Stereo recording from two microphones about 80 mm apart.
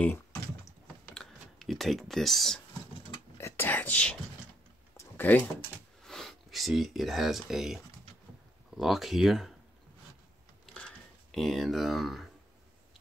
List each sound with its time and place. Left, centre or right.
0.0 s typing: left
1.1 s speech: centre
3.3 s whispering: left; by 4.2 s centre
4.9 s a sound: left
6.0 s speech: centre
11.3 s speech: centre